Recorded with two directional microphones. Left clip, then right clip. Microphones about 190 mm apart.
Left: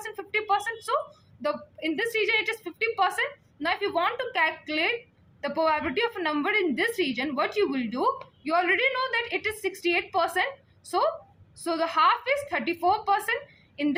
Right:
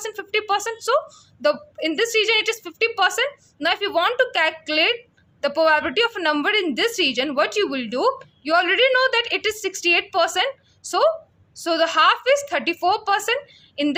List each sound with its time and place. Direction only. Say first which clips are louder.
0.0 s a woman's voice: right 5 dB; 50° right (ahead or behind)
11.5 s a woman's voice: right 7 dB; 50° right (ahead or behind)